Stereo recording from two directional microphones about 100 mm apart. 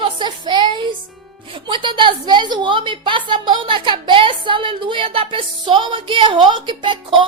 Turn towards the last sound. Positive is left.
turn(degrees=-55)  # may be behind; listen again after turning